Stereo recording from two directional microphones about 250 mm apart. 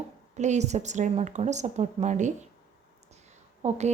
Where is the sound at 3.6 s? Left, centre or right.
Right.